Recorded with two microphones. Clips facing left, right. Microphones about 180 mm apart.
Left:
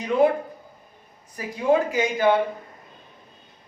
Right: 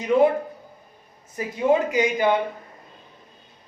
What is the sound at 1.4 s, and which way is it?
Speech, 25° right (ahead or behind).